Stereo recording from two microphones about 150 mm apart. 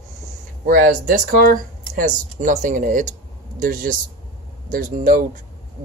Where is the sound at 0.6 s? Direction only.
70° right (ahead or behind).